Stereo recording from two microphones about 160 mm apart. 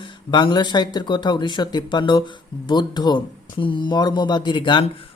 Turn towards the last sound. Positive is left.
turn(degrees=35)  # may be behind; listen again after turning